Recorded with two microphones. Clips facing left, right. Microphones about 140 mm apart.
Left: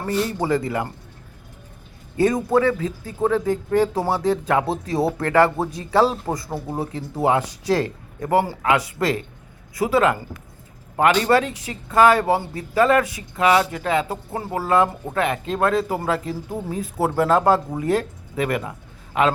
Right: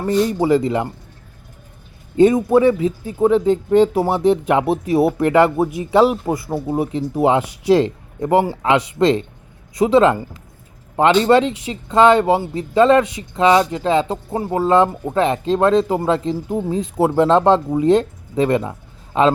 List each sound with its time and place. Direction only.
0.3 s speech: 20° right (ahead or behind)
2.1 s speech: 15° right (ahead or behind)